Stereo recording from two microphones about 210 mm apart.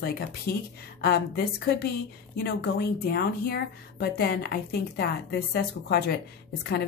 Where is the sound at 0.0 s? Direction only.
45° left (ahead or behind).